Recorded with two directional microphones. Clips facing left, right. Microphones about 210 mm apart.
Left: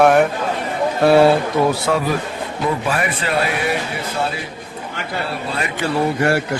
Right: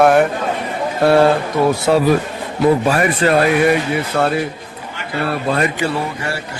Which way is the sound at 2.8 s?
40° right (ahead or behind).